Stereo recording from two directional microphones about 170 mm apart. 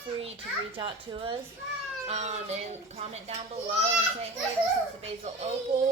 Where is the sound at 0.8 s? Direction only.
30° right (ahead or behind).